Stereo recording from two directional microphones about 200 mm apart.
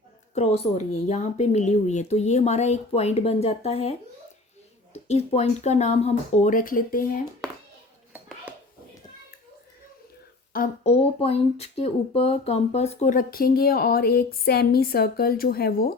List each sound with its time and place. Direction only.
0.3 s speech: 30° left (ahead or behind)
5.0 s speech: 35° left (ahead or behind)
8.5 s music: 10° right (ahead or behind)
10.8 s speech: 30° left (ahead or behind); by 16.0 s 50° left (ahead or behind)